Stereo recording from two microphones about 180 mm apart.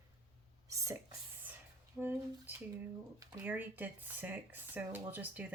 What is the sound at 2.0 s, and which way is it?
Drip, 5° right (ahead or behind).